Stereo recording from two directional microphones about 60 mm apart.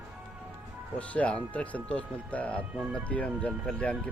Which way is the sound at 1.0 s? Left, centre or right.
Left.